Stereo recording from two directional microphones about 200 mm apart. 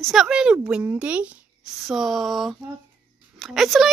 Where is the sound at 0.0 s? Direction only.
Centre (ahead or behind).